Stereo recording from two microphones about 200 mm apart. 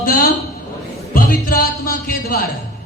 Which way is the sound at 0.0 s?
45° left (ahead or behind).